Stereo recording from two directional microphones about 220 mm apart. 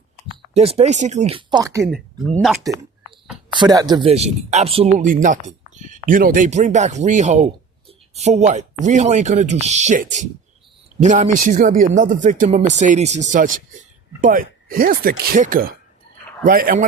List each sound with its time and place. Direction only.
0.5 s speech: 25° right (ahead or behind)
1.8 s speech: centre (ahead or behind)
3.5 s speech: 20° right (ahead or behind); by 16.8 s 40° right (ahead or behind)